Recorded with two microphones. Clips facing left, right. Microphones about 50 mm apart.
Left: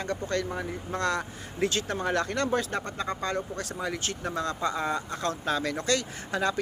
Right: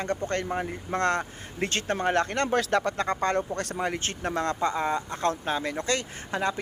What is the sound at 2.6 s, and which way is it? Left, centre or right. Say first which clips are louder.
Speech: right 5 dB; right.